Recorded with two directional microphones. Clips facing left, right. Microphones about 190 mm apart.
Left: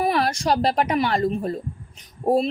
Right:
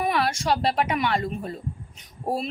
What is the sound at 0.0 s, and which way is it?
A woman's voice, 40° left (ahead or behind).